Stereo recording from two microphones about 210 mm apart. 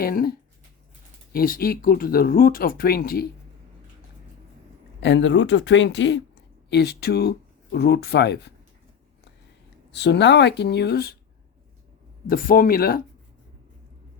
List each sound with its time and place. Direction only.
0.0 s speech: 45° left (ahead or behind)
4.9 s speech: 60° left (ahead or behind)
9.9 s speech: 55° left (ahead or behind)
12.3 s speech: 45° left (ahead or behind)